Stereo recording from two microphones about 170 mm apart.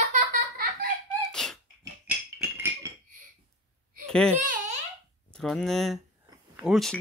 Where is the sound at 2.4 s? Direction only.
15° right (ahead or behind).